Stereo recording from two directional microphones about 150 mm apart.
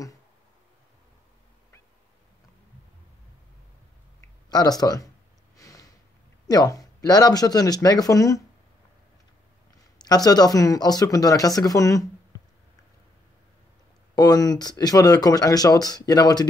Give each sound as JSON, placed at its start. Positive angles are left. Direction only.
{"t": 4.5, "sound": "speech", "side_deg": 25}
{"t": 5.6, "sound": "a sound", "side_deg": 25}
{"t": 6.4, "sound": "speech", "side_deg": 25}
{"t": 9.9, "sound": "speech", "side_deg": 25}
{"t": 14.1, "sound": "speech", "side_deg": 25}